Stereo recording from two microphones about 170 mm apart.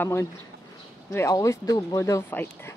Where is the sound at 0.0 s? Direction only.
15° left (ahead or behind).